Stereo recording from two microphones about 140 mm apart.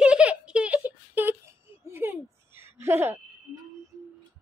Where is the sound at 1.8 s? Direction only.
15° right (ahead or behind).